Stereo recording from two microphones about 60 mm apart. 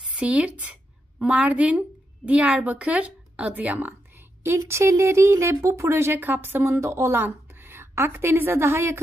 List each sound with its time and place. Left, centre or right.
0.1 s a woman's voice: centre
4.6 s speech: right
6.1 s speech: right
6.7 s speech: right
7.1 s a woman's voice: right